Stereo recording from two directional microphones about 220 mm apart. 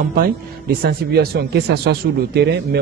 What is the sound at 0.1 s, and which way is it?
A man's voice, 45° right (ahead or behind).